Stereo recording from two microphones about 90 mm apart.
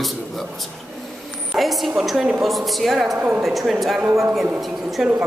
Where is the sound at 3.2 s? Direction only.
20° right (ahead or behind).